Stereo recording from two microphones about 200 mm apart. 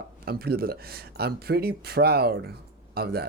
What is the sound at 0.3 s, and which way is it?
Speech, 50° right (ahead or behind).